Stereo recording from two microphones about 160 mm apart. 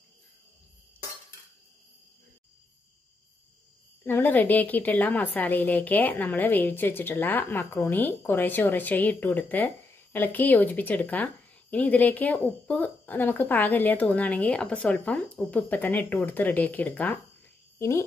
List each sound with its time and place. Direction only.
4.0 s a woman's voice: 10° left (ahead or behind)